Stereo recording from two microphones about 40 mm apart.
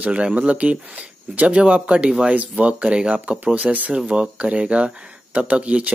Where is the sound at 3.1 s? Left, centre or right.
Right.